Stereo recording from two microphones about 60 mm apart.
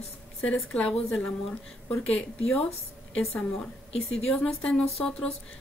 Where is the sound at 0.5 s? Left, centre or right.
Centre.